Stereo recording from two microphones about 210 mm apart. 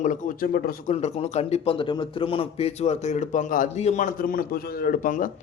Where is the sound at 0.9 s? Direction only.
30° left (ahead or behind).